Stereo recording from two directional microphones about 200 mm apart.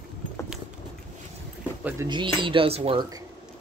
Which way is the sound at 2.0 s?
25° right (ahead or behind).